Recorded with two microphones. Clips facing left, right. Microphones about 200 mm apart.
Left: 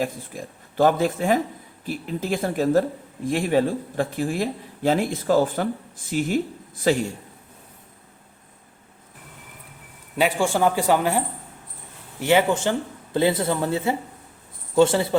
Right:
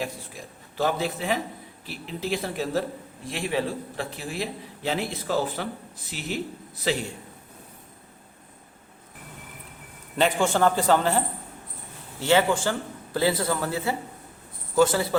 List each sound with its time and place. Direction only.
0.0 s speech: 50° left (ahead or behind)
10.2 s speech: 10° left (ahead or behind)
12.2 s speech: 15° left (ahead or behind)